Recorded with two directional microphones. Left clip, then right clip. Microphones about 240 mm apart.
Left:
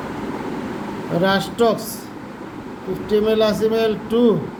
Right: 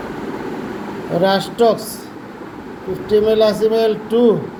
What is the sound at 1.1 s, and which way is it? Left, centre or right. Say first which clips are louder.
Speech: right 3 dB; centre.